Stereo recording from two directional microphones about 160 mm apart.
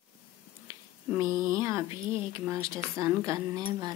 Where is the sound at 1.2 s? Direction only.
25° left (ahead or behind).